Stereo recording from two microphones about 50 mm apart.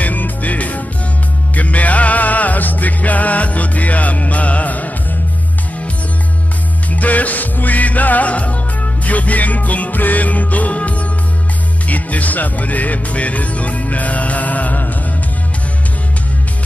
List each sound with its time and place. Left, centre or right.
0.0 s music: left
6.9 s music: left
11.9 s speech: left